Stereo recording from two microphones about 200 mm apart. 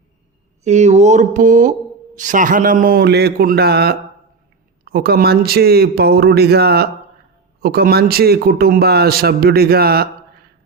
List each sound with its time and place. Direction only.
0.6 s a man's voice: 35° right (ahead or behind); by 10.1 s 50° right (ahead or behind)